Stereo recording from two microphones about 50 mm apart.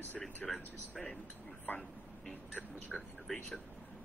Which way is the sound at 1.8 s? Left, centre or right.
Centre.